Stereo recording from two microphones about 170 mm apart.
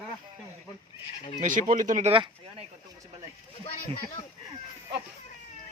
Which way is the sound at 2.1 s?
30° right (ahead or behind).